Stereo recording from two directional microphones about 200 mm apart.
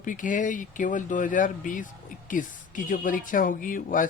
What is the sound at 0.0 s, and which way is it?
Speech, 40° left (ahead or behind).